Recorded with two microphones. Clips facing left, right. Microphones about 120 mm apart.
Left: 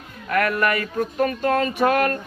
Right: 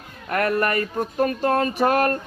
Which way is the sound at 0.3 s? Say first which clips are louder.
Left 1 dB; 35° right (ahead or behind).